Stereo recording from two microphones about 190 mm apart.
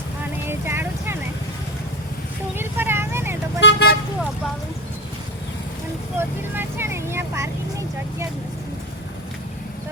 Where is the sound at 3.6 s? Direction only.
65° left (ahead or behind).